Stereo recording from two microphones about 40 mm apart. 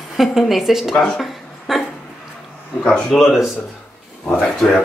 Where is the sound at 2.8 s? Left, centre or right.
Left.